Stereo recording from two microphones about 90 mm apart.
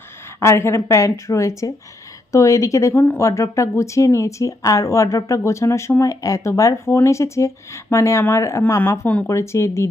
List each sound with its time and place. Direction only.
0.3 s a woman's voice: 30° left (ahead or behind)